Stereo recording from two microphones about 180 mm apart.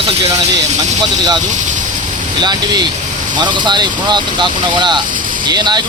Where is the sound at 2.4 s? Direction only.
25° right (ahead or behind).